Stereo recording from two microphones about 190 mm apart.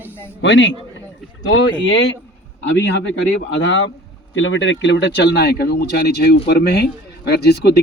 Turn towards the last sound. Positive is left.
turn(degrees=60)  # may be behind; listen again after turning